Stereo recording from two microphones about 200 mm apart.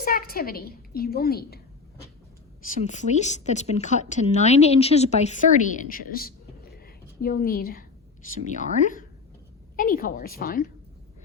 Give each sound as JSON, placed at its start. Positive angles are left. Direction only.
{"t": 0.0, "sound": "a woman's voice", "side_deg": 45}
{"t": 2.8, "sound": "a woman's voice", "side_deg": 35}